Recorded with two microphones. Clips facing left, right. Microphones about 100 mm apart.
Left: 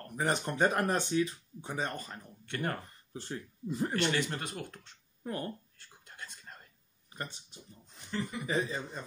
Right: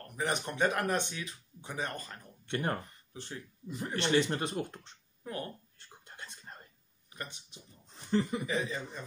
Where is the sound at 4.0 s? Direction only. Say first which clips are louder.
Right 3 dB; 30° right (ahead or behind).